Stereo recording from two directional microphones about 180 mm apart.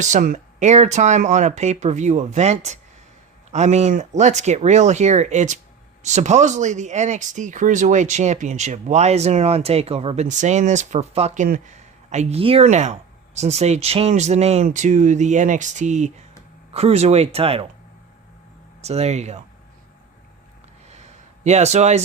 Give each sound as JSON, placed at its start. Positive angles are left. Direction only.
{"t": 0.0, "sound": "speech", "side_deg": -45}
{"t": 11.4, "sound": "speech", "side_deg": -50}
{"t": 12.1, "sound": "speech", "side_deg": -35}
{"t": 18.8, "sound": "speech", "side_deg": -35}
{"t": 21.4, "sound": "speech", "side_deg": -40}